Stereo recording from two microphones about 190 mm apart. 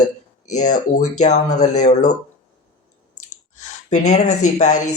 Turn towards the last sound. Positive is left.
turn(degrees=40)  # may be behind; listen again after turning